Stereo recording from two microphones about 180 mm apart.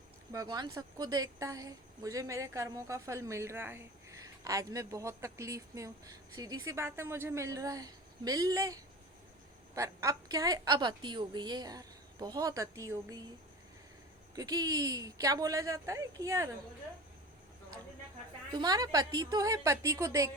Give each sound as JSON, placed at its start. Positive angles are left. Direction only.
{"t": 0.3, "sound": "a woman's voice", "side_deg": -20}
{"t": 14.3, "sound": "a woman's voice", "side_deg": -20}
{"t": 18.5, "sound": "a woman's voice", "side_deg": -20}